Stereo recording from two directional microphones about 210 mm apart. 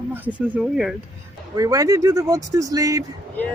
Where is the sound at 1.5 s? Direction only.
15° right (ahead or behind).